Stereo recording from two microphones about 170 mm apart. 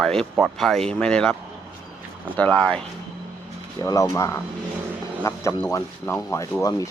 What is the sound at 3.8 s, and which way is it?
Speech, 20° left (ahead or behind).